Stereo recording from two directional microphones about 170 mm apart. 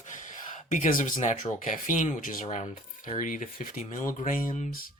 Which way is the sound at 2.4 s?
35° left (ahead or behind).